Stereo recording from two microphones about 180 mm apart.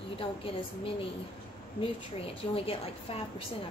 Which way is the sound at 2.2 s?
30° left (ahead or behind).